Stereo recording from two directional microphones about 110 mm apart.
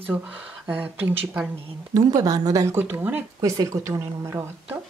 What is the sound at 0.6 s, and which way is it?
Speech, 15° right (ahead or behind).